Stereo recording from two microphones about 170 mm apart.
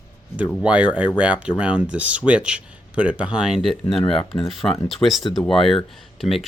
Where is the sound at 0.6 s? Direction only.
5° right (ahead or behind).